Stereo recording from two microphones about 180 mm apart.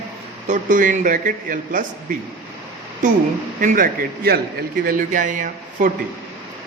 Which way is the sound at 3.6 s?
50° right (ahead or behind).